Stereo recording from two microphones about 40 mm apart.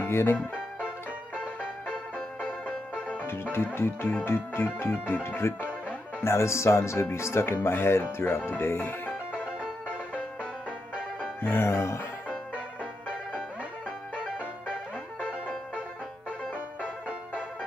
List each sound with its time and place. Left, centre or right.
0.0 s speech: left
3.5 s music: left
6.2 s speech: left
6.7 s music: left
7.1 s speech: left
8.5 s music: left
11.4 s music: left
14.1 s music: right
16.3 s music: right